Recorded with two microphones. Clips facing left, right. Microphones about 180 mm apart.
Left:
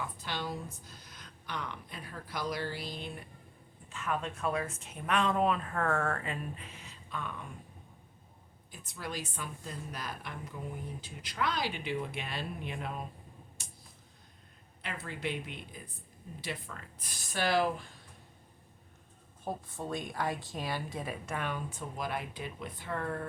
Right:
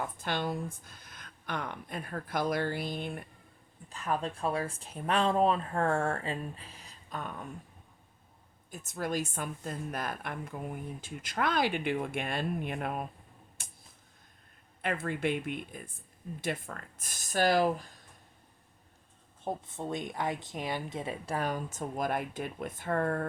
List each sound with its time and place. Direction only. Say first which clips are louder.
0.0 s a woman's voice: right 5 dB; 50° right (ahead or behind)
3.8 s speech: right 2 dB; 35° right (ahead or behind)
8.7 s a woman's voice: right 7 dB; 45° right (ahead or behind)
13.6 s a sound: even; 55° right (ahead or behind)
14.8 s a woman's voice: right 8 dB; 55° right (ahead or behind)
19.5 s speech: right 2 dB; 20° right (ahead or behind); by 23.2 s 50° right (ahead or behind)